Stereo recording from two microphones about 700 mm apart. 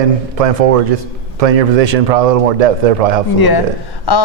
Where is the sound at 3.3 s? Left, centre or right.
Left.